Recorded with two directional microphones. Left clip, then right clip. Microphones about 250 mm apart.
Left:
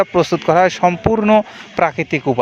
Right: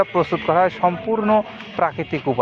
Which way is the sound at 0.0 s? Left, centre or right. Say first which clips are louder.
Left 4 dB; left.